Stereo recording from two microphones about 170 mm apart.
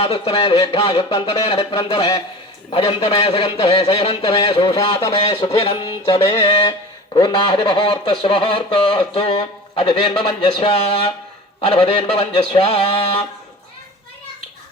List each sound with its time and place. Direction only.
0.0 s speech: 35° left (ahead or behind)
5.5 s speech: 35° left (ahead or behind)
10.7 s speech: 35° left (ahead or behind)